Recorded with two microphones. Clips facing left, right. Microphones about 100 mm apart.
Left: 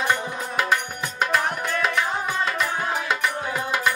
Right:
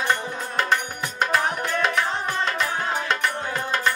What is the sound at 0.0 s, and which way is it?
Music, 10° left (ahead or behind).